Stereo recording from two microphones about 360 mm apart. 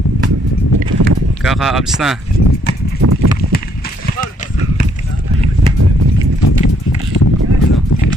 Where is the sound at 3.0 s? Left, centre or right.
Right.